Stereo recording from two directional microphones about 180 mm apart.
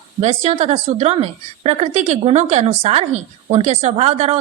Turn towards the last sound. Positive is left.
turn(degrees=-35)  # may be behind; listen again after turning